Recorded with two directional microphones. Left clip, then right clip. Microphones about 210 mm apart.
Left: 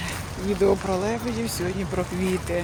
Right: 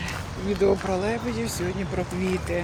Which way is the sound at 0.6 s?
15° left (ahead or behind).